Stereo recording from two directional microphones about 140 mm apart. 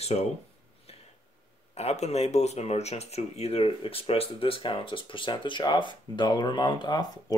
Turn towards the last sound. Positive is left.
turn(degrees=30)  # may be behind; listen again after turning